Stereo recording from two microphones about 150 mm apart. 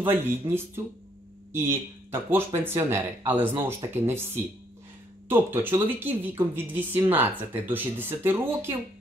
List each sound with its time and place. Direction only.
0.0 s speech: 15° right (ahead or behind)